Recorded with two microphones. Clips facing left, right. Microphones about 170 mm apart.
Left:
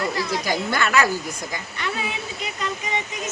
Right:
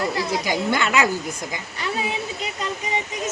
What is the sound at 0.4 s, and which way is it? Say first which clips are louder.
Speech: right 1 dB; 20° right (ahead or behind).